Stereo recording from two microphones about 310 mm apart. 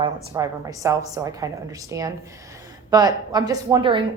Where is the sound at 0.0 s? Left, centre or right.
Centre.